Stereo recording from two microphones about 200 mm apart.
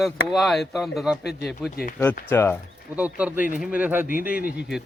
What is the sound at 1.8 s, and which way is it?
Speech, 50° left (ahead or behind).